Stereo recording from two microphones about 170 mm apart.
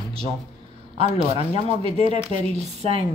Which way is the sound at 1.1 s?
40° left (ahead or behind).